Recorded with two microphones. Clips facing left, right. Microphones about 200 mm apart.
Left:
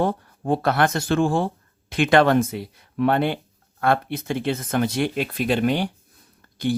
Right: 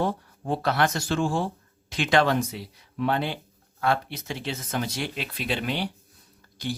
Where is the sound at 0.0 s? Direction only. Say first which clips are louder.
Left 4 dB; 55° left (ahead or behind).